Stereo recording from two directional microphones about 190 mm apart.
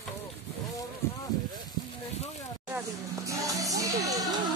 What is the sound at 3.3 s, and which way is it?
Speech, 15° right (ahead or behind).